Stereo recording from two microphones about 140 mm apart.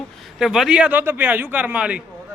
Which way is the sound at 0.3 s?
Centre (ahead or behind).